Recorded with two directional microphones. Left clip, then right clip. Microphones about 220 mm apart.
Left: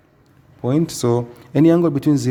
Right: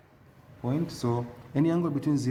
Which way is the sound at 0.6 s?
50° left (ahead or behind).